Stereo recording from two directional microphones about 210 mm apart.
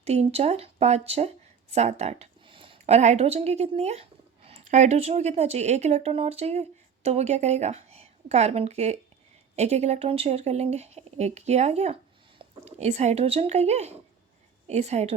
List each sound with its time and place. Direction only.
0.0 s speech: 30° right (ahead or behind)